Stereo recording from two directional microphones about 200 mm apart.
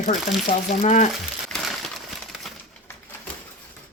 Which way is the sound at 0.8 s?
35° left (ahead or behind).